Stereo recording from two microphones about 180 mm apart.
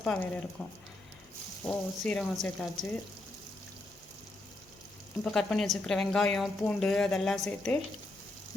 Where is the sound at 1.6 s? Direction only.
5° left (ahead or behind).